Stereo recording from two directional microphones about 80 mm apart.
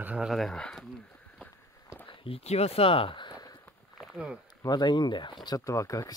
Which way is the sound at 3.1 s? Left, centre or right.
Left.